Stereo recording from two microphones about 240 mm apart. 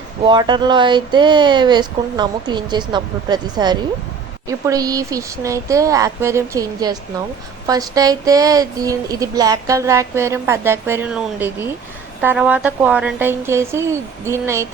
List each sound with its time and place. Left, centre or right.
0.3 s a woman's voice: centre